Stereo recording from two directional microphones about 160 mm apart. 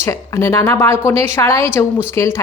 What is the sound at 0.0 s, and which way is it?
A woman's voice, 15° left (ahead or behind).